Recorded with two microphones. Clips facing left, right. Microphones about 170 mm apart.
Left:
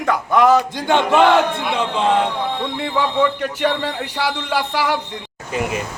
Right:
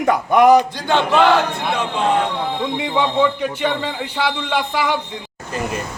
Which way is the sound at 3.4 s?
5° left (ahead or behind).